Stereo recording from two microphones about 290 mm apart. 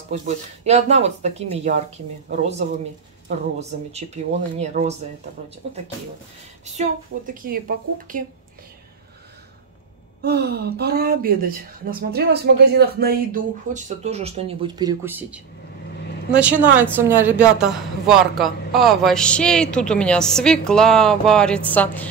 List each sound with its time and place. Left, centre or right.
0.1 s a woman's voice: right
6.6 s a woman's voice: right
10.2 s a woman's voice: right; by 22.1 s centre